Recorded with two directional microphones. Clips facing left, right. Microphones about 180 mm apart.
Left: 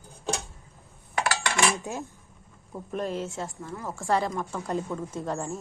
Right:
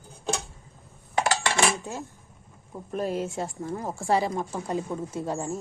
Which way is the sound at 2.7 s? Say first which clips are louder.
Right 2 dB; centre (ahead or behind).